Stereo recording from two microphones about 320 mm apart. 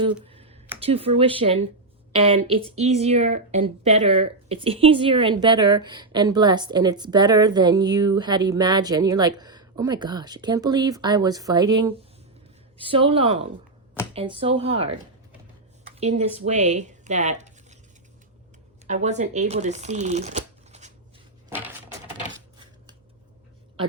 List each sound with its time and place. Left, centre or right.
0.3 s a sound: centre
0.8 s a woman's voice: centre
15.8 s a sound: right
16.6 s speech: right
18.9 s speech: right
21.5 s crushing: centre
22.3 s coin: centre